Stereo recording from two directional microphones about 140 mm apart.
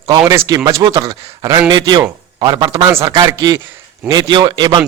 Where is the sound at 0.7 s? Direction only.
20° right (ahead or behind).